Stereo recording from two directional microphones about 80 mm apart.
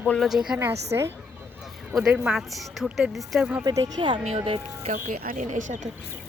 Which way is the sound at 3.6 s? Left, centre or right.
Right.